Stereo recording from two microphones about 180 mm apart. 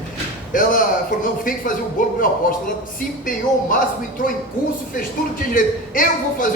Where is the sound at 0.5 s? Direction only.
50° left (ahead or behind).